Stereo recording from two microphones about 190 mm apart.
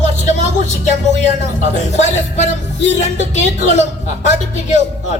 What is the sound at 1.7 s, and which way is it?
Speech, 35° left (ahead or behind).